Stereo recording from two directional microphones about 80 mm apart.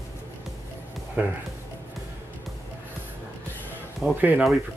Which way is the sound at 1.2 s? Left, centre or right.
Right.